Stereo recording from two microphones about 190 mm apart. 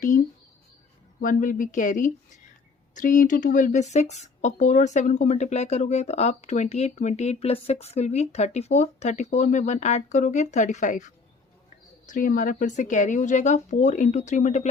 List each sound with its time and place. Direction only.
1.2 s speech: 45° left (ahead or behind)